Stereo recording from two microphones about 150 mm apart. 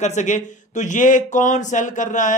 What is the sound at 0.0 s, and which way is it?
Speech, 50° left (ahead or behind).